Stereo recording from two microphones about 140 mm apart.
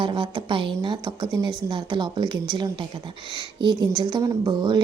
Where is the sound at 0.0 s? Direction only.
35° right (ahead or behind).